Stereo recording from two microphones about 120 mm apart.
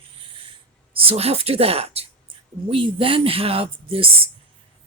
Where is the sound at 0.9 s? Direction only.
55° right (ahead or behind).